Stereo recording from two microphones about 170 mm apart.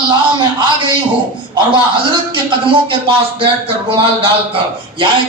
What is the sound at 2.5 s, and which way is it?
Speech, 30° right (ahead or behind).